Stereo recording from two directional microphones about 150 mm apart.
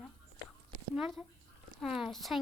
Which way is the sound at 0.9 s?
5° right (ahead or behind).